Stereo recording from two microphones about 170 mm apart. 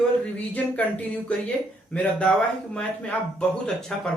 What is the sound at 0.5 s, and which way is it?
A man's voice, 10° left (ahead or behind).